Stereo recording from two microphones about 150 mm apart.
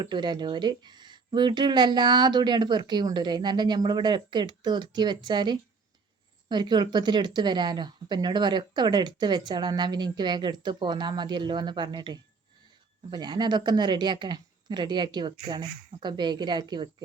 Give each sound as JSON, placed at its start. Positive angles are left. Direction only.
{"t": 0.0, "sound": "speech", "side_deg": -30}